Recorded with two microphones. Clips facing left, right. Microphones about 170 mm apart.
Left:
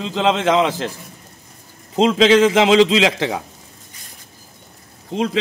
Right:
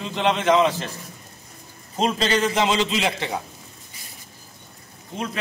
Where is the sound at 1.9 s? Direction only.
90° left.